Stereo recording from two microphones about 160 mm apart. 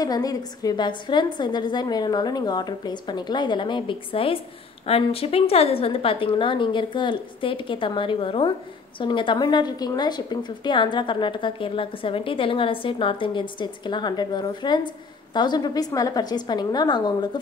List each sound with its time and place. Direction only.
0.0 s a woman's voice: 25° left (ahead or behind)